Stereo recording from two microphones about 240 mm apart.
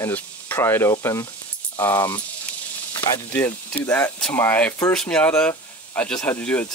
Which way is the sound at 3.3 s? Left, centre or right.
Centre.